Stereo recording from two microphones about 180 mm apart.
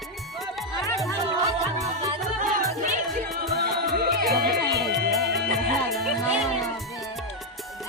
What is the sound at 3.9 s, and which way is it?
Music, 60° right (ahead or behind).